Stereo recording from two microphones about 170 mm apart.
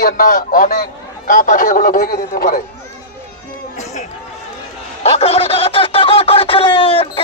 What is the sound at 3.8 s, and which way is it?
Run, 40° left (ahead or behind).